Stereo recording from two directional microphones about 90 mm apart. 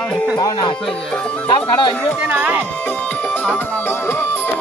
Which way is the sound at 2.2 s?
20° right (ahead or behind).